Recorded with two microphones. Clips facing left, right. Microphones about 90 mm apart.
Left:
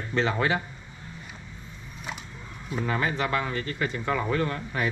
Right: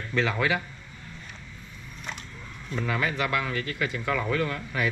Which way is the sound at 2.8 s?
25° left (ahead or behind).